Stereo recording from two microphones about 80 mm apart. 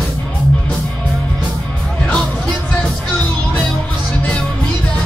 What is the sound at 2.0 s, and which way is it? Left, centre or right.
Music, centre.